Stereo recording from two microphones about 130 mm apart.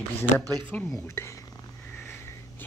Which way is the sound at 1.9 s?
15° left (ahead or behind).